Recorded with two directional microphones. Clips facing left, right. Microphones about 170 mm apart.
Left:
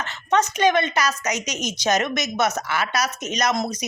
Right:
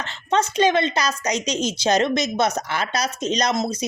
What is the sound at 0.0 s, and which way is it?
A woman's voice, 30° right (ahead or behind).